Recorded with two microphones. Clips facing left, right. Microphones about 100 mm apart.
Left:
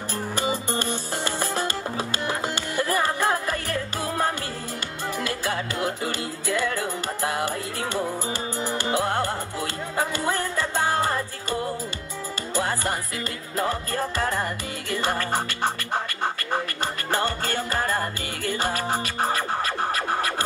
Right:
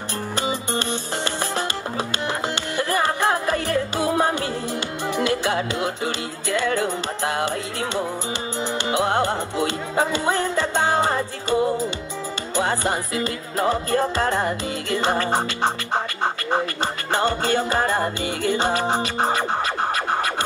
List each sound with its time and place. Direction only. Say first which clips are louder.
3.2 s music: right 3 dB; 15° right (ahead or behind)
8.7 s music: right 4 dB; 15° right (ahead or behind)